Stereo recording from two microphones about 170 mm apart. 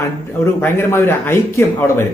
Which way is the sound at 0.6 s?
15° left (ahead or behind).